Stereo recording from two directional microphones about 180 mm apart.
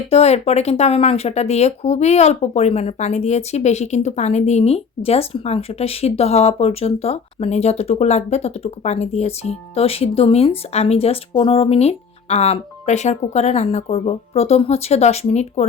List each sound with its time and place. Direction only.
0.1 s speech: 35° left (ahead or behind)